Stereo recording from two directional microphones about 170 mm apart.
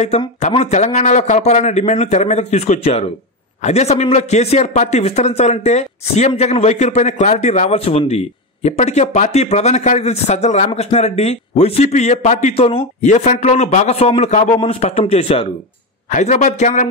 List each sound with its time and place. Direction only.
0.4 s speech: 40° left (ahead or behind)
16.2 s a man's voice: 45° left (ahead or behind)